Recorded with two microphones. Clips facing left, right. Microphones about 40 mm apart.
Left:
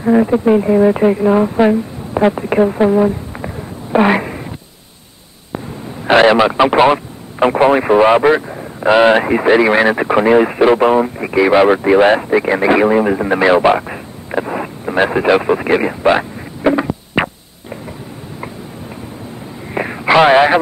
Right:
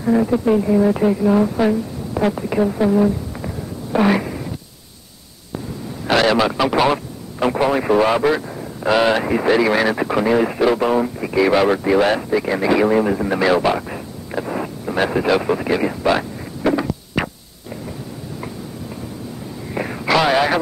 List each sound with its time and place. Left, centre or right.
0.0 s speech: left
6.0 s speech: left
19.7 s radio: left